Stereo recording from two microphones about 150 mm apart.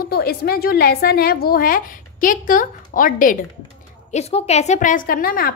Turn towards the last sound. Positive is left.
turn(degrees=70)  # may be behind; listen again after turning